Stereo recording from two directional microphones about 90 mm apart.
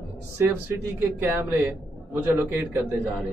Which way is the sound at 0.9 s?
25° right (ahead or behind).